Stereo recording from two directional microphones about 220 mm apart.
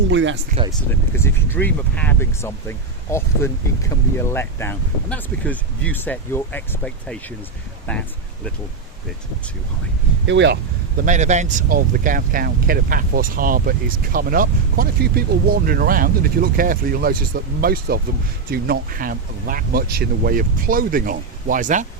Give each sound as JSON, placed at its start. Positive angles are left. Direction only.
{"t": 0.1, "sound": "speech", "side_deg": -55}
{"t": 0.7, "sound": "speech", "side_deg": 10}
{"t": 10.2, "sound": "speech", "side_deg": -55}
{"t": 11.0, "sound": "speech", "side_deg": -35}